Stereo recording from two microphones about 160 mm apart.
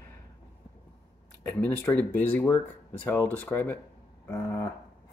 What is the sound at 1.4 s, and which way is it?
Speech, 10° left (ahead or behind).